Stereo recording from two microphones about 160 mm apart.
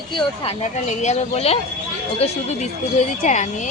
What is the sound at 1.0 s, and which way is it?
A woman's voice, 45° left (ahead or behind).